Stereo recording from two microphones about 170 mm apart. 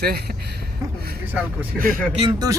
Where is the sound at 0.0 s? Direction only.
65° right (ahead or behind).